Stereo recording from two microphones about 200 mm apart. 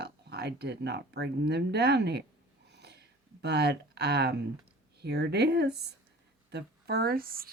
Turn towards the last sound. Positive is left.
turn(degrees=-45)  # may be behind; listen again after turning